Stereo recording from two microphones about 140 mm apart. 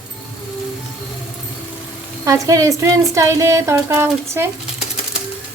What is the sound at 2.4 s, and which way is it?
Speech, 25° right (ahead or behind).